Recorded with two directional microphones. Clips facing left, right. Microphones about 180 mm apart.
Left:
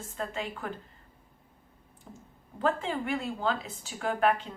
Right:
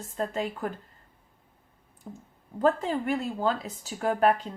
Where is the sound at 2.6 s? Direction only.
40° right (ahead or behind).